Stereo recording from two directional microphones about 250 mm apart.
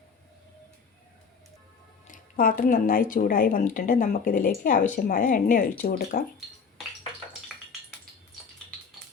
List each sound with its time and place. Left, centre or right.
2.0 s a woman's voice: left